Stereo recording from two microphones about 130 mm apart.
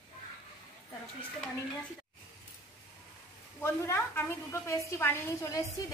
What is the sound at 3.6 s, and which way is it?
A woman's voice, 20° left (ahead or behind).